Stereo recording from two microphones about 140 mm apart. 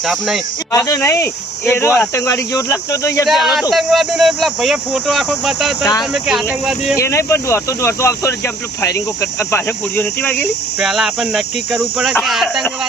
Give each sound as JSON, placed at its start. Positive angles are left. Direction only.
{"t": 0.0, "sound": "speech", "side_deg": 0}
{"t": 0.7, "sound": "speech", "side_deg": 20}
{"t": 3.2, "sound": "speech", "side_deg": 0}
{"t": 5.8, "sound": "speech", "side_deg": 30}
{"t": 6.1, "sound": "speech", "side_deg": 0}
{"t": 6.9, "sound": "speech", "side_deg": 20}
{"t": 10.8, "sound": "speech", "side_deg": -5}